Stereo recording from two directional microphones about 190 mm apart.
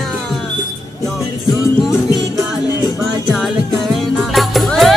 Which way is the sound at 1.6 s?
15° left (ahead or behind).